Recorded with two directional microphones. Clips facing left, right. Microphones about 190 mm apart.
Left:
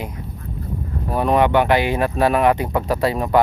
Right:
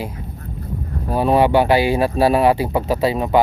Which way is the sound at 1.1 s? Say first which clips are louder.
Right 2 dB; 30° right (ahead or behind).